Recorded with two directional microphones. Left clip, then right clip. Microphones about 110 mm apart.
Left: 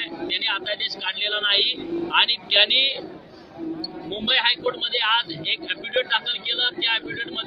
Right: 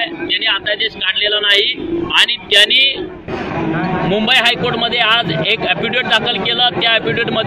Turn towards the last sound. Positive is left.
turn(degrees=40)  # may be behind; listen again after turning